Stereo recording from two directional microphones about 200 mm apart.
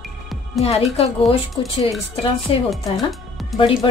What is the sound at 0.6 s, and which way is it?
Speech, 30° left (ahead or behind).